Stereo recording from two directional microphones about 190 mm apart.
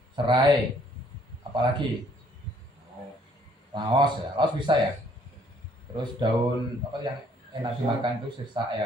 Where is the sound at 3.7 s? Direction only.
25° right (ahead or behind).